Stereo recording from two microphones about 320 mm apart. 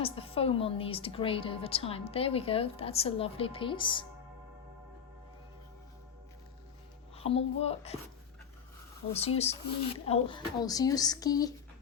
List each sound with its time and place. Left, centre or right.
0.0 s a woman's voice: centre
7.2 s speech: centre
9.1 s a woman's voice: centre